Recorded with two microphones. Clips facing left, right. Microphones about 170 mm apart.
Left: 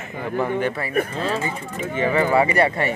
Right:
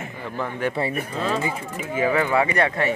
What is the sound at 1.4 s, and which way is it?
Speech, 10° right (ahead or behind).